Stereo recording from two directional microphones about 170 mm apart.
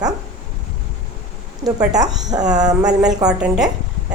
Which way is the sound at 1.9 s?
20° right (ahead or behind).